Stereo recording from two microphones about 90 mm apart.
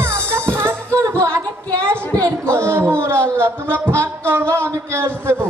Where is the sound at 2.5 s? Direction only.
30° right (ahead or behind).